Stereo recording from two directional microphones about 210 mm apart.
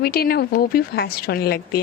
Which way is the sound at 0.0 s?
45° left (ahead or behind).